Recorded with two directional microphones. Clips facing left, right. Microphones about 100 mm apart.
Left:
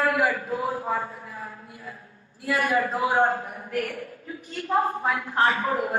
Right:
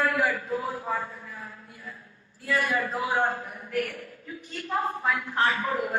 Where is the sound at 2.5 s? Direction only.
30° left (ahead or behind).